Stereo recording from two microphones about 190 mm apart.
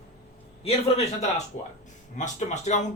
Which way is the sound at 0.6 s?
35° left (ahead or behind).